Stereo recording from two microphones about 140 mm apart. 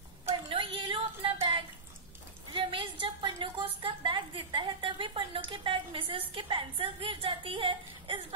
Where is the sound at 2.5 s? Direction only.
35° right (ahead or behind).